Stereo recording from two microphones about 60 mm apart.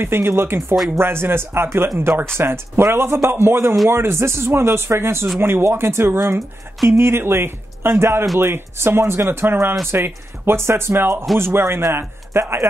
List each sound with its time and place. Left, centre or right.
0.0 s speech: right